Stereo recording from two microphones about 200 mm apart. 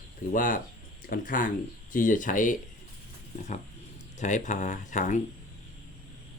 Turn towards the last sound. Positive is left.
turn(degrees=40)  # may be behind; listen again after turning